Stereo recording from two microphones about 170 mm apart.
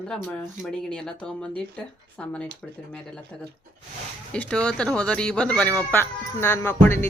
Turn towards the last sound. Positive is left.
turn(degrees=15)  # may be behind; listen again after turning